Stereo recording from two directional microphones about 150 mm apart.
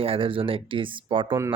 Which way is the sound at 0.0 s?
40° right (ahead or behind).